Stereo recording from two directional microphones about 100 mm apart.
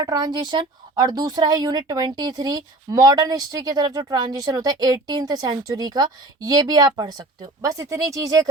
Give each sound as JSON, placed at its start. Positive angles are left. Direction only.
{"t": 0.0, "sound": "speech", "side_deg": -40}